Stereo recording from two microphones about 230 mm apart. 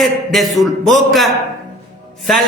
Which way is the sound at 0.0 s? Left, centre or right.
Centre.